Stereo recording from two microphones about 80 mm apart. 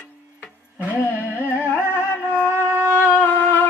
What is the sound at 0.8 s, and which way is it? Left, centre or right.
Music, left.